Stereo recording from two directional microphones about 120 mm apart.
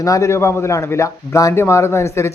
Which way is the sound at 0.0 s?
25° left (ahead or behind).